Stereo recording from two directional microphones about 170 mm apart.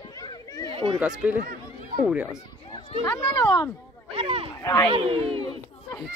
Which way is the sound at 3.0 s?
20° left (ahead or behind).